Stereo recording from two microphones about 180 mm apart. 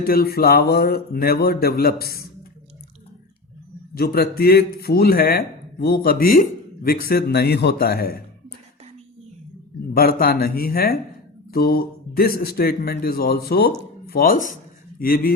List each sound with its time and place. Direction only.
0.0 s a man's voice: 55° left (ahead or behind)
3.9 s a man's voice: 60° left (ahead or behind)
9.9 s a man's voice: 55° left (ahead or behind)